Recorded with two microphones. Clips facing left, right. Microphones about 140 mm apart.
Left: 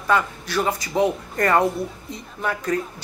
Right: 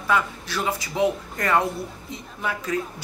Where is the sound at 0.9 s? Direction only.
35° left (ahead or behind).